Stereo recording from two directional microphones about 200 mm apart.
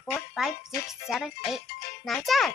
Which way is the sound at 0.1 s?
Centre (ahead or behind).